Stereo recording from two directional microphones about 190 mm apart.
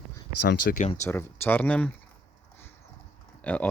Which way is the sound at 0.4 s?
65° left (ahead or behind).